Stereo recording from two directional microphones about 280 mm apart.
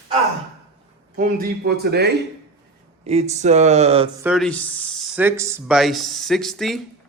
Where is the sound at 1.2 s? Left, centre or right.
Right.